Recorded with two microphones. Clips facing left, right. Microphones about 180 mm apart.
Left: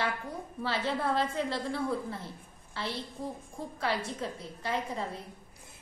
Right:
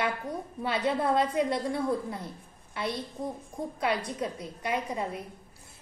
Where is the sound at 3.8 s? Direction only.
15° right (ahead or behind).